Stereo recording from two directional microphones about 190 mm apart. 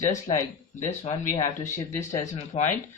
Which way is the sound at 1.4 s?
15° left (ahead or behind).